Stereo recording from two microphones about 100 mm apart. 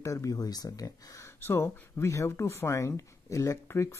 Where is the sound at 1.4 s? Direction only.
25° left (ahead or behind).